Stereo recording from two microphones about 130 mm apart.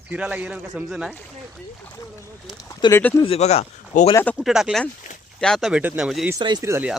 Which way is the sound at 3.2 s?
50° left (ahead or behind).